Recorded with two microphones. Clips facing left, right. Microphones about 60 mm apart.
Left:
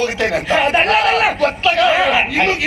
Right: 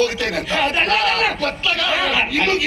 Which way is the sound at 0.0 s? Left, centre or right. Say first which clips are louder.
Left 2 dB; left.